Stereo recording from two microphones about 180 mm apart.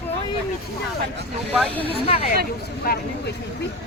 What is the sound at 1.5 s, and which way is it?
Speech, 5° left (ahead or behind).